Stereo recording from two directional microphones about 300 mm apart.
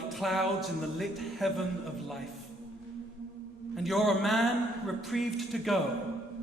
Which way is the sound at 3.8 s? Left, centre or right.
Centre.